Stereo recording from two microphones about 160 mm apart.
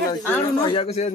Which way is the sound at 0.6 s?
30° left (ahead or behind).